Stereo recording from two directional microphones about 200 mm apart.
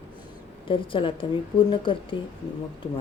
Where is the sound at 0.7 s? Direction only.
25° left (ahead or behind).